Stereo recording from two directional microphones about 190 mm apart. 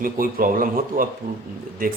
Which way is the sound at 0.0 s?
50° right (ahead or behind).